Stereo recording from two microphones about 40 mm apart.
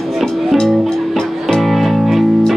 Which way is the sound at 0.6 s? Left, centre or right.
Centre.